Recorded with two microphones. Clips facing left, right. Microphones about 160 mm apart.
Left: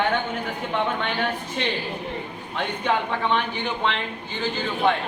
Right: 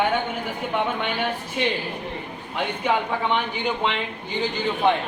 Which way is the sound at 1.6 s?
5° right (ahead or behind).